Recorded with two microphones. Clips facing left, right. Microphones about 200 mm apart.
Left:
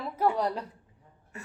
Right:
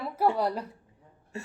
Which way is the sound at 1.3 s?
25° right (ahead or behind).